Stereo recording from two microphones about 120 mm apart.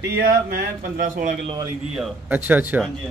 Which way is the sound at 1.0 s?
90° right.